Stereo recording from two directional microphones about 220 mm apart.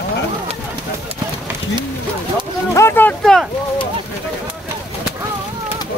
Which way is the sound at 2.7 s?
10° left (ahead or behind).